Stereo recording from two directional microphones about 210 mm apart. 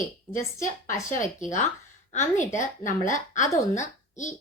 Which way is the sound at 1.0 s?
35° left (ahead or behind).